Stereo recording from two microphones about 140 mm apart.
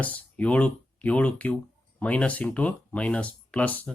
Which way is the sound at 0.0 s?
10° left (ahead or behind).